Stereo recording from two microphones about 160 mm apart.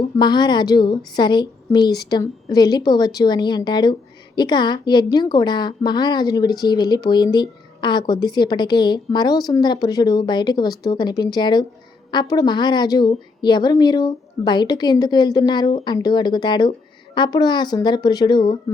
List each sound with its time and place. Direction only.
0.2 s a woman's voice: 25° left (ahead or behind)